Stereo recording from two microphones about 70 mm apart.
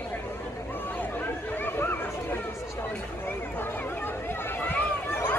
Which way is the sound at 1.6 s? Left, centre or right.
Left.